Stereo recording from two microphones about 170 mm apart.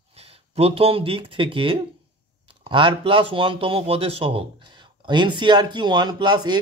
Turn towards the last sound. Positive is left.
turn(degrees=-25)  # may be behind; listen again after turning